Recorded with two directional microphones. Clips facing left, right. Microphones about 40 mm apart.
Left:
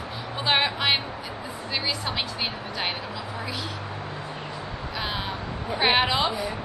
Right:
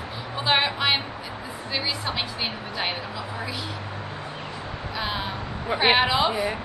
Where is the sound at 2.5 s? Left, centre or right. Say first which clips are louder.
Right 1 dB; centre.